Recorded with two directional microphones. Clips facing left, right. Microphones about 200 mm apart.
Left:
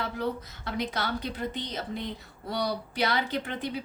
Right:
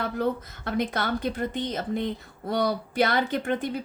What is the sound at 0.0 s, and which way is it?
Speech, 50° right (ahead or behind).